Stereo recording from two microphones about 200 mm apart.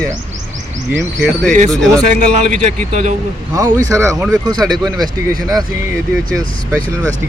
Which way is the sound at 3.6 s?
15° right (ahead or behind).